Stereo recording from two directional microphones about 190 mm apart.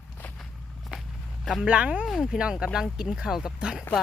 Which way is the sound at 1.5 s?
5° right (ahead or behind).